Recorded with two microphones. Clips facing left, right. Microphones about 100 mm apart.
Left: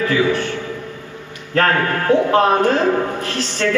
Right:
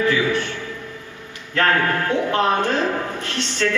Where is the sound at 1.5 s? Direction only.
35° left (ahead or behind).